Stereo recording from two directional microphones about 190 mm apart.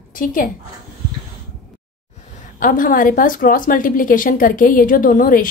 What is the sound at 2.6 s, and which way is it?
A woman's voice, 45° left (ahead or behind).